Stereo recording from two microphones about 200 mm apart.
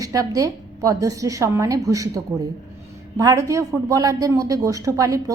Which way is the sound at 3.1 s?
15° right (ahead or behind).